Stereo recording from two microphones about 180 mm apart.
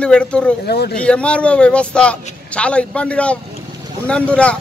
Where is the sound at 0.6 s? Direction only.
65° left (ahead or behind).